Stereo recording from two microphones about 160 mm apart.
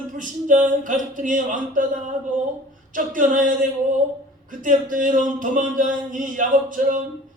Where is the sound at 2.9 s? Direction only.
55° right (ahead or behind).